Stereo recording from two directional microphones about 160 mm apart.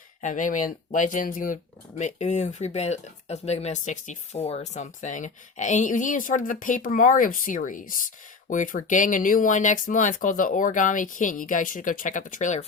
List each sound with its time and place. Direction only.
0.2 s speech: 50° left (ahead or behind)